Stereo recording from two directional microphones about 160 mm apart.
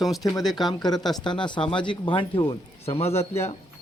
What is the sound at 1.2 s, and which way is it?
A man's voice, 30° left (ahead or behind).